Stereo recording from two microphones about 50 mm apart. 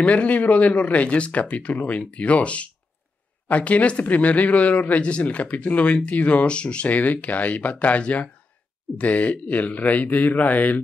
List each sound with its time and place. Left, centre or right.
0.0 s a man's voice: left